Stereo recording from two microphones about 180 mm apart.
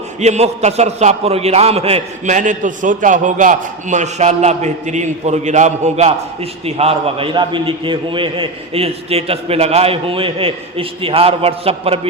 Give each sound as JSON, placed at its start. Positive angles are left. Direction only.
{"t": 0.2, "sound": "a man's voice", "side_deg": -40}